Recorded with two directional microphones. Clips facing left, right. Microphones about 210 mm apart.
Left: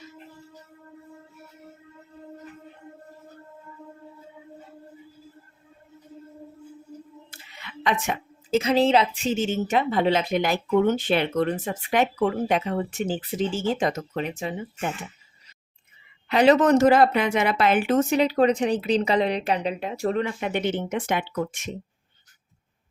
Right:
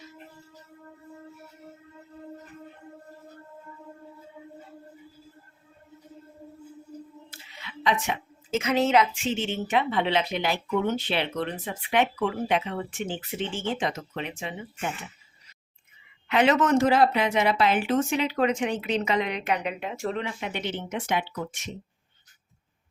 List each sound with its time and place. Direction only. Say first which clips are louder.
7.3 s a sound: even; 55° left (ahead or behind)
8.4 s a woman's voice: left 4 dB; 35° left (ahead or behind)
16.3 s a man's voice: left 4 dB; 35° left (ahead or behind)
16.8 s a woman's voice: left 4 dB; 50° left (ahead or behind)